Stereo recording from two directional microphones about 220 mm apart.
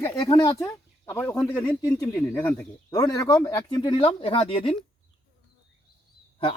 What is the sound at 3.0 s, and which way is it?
Speech, 15° left (ahead or behind).